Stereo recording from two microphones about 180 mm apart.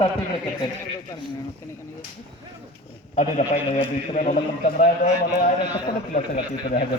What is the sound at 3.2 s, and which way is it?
A man's voice, 40° left (ahead or behind).